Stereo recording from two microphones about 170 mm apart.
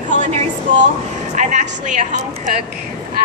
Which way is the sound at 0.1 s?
45° right (ahead or behind).